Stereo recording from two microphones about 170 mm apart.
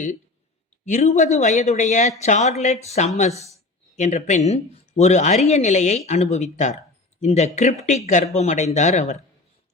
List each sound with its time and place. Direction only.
0.9 s speech: 45° left (ahead or behind)